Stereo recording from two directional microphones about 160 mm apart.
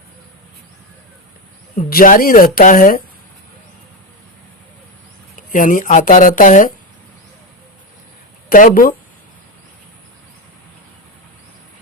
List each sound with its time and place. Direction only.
1.7 s speech: 60° left (ahead or behind)
5.4 s speech: 55° left (ahead or behind)
8.4 s speech: 60° left (ahead or behind)